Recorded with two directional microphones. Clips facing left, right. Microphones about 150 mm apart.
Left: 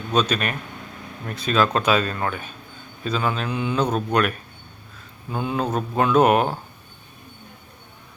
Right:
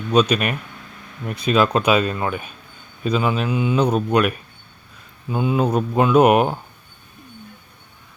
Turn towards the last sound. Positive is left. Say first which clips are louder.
# right 3 dB
turn(degrees=-10)  # may be behind; listen again after turning